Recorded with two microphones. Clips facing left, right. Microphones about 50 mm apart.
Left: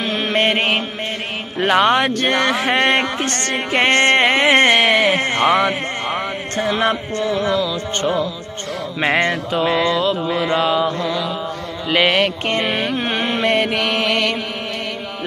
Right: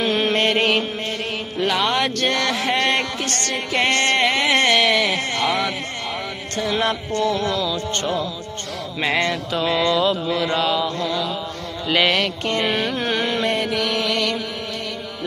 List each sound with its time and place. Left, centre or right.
0.0 s mantra: centre
0.4 s mantra: left
1.6 s speech: left
6.7 s music: left
9.5 s mantra: centre
10.2 s music: left
11.0 s mantra: centre
11.9 s music: centre
12.5 s carnatic music: left
13.5 s mantra: left